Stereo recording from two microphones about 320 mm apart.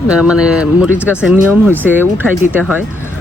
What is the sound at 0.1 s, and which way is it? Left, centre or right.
Speech, centre.